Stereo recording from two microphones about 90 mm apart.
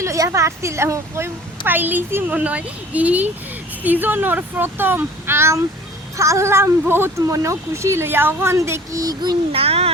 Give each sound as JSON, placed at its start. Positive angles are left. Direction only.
{"t": 0.0, "sound": "a woman's voice", "side_deg": -35}
{"t": 7.2, "sound": "a woman's voice", "side_deg": -40}
{"t": 9.5, "sound": "a child's voice", "side_deg": -90}